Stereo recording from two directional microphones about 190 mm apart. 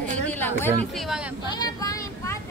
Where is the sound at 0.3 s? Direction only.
10° left (ahead or behind).